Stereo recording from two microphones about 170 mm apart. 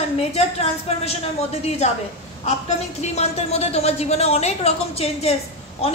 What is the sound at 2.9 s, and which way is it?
A woman's voice, 40° left (ahead or behind).